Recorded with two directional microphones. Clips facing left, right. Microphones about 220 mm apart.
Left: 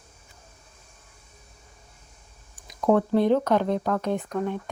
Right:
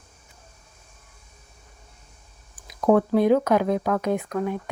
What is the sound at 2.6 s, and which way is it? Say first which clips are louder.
Speech: right 2 dB; 5° right (ahead or behind).